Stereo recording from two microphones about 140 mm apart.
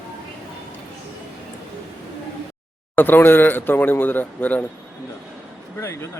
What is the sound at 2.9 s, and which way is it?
Speech, 15° left (ahead or behind).